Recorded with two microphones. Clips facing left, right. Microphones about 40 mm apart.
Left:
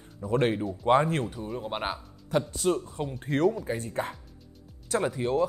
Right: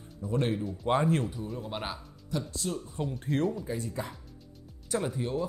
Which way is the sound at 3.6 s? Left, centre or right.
Left.